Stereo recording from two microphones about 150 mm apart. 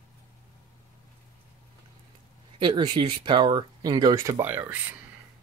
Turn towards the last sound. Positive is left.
turn(degrees=-15)  # may be behind; listen again after turning